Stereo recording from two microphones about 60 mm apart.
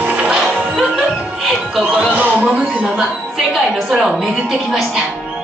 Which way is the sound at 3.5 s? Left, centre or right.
Centre.